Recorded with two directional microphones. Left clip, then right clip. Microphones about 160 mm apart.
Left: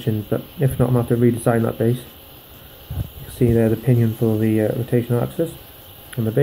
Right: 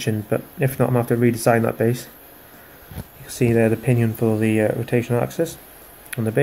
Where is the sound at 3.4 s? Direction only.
20° right (ahead or behind).